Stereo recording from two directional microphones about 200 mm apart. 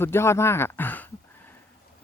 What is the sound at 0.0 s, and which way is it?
Speech, 10° left (ahead or behind).